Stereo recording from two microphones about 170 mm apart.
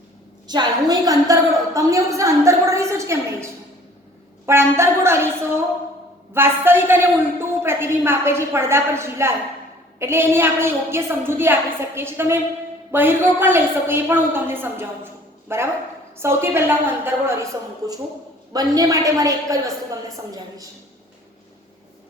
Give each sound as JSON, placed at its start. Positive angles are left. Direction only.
{"t": 0.4, "sound": "a woman's voice", "side_deg": -25}
{"t": 18.5, "sound": "a woman's voice", "side_deg": -20}